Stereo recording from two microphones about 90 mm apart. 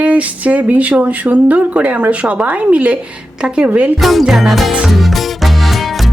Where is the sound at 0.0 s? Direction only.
15° right (ahead or behind).